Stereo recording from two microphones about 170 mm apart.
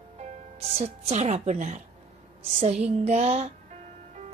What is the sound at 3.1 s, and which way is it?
Speech, 40° right (ahead or behind).